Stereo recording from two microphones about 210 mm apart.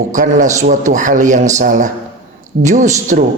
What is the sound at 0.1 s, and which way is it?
Speech, 35° right (ahead or behind).